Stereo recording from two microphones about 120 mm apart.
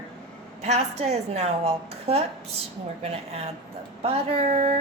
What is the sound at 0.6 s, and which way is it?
A woman's voice, 65° right (ahead or behind).